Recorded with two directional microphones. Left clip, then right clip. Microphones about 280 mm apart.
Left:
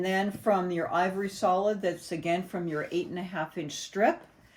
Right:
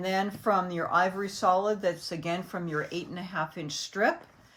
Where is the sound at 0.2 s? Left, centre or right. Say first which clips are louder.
Right 2 dB; centre.